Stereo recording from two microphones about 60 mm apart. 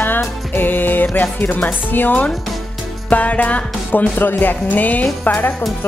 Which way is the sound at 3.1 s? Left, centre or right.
Left.